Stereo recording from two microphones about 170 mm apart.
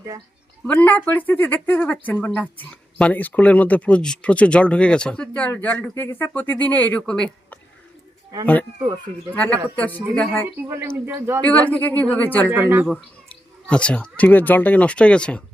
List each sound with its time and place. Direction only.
0.6 s speech: 10° left (ahead or behind)
9.3 s speech: 10° left (ahead or behind)
10.7 s a man's voice: 15° right (ahead or behind)
11.4 s speech: 10° left (ahead or behind)
12.5 s a man's voice: 10° right (ahead or behind)
12.9 s speech: 5° left (ahead or behind)